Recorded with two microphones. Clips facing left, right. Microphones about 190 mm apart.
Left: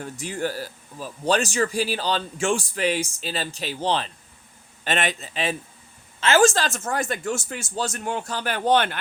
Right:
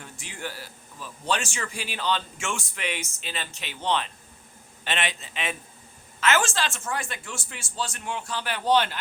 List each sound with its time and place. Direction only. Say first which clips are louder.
0.0 s speech: left 9 dB; 40° left (ahead or behind)
4.8 s speech: left 5 dB; 45° left (ahead or behind)